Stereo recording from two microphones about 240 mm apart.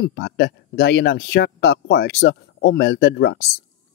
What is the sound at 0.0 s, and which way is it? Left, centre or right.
Speech, left.